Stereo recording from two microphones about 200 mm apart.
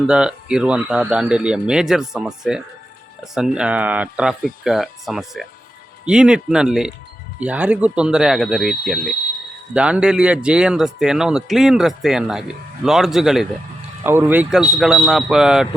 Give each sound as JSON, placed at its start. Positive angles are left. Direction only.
{"t": 0.1, "sound": "speech", "side_deg": -5}